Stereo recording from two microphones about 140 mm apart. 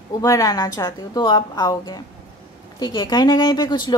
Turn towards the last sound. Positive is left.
turn(degrees=30)  # may be behind; listen again after turning